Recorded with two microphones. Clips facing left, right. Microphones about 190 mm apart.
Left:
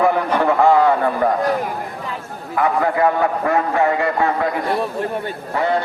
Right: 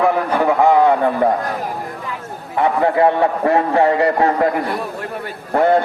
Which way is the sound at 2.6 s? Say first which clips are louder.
Right 2 dB; 25° right (ahead or behind).